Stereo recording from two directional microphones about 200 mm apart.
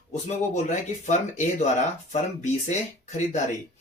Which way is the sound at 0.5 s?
35° left (ahead or behind).